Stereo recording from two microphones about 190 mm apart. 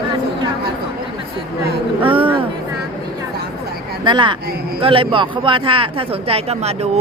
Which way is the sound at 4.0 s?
25° right (ahead or behind).